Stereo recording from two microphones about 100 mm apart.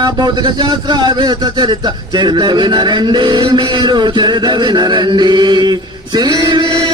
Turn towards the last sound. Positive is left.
turn(degrees=-45)  # may be behind; listen again after turning